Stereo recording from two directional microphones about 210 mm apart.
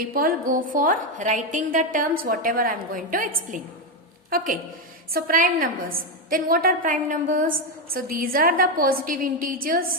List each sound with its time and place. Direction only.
0.0 s a woman's voice: 45° right (ahead or behind)
4.3 s a woman's voice: 45° right (ahead or behind)